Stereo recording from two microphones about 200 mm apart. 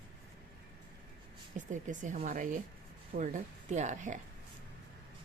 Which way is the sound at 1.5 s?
40° right (ahead or behind).